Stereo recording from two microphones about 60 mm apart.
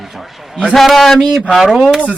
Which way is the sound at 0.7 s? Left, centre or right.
Centre.